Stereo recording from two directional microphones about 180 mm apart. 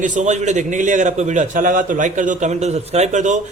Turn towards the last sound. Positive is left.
turn(degrees=-45)  # may be behind; listen again after turning